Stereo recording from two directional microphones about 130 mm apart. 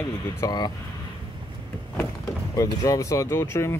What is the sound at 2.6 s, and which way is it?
Speech, 25° left (ahead or behind).